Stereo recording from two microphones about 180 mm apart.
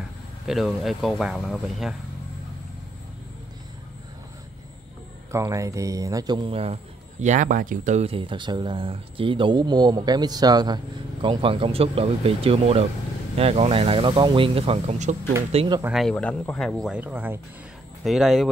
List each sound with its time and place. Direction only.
0.5 s speech: centre (ahead or behind)
5.3 s a man's voice: 15° right (ahead or behind); by 15.1 s 40° right (ahead or behind)
15.5 s speech: 30° right (ahead or behind)
15.8 s speech: centre (ahead or behind)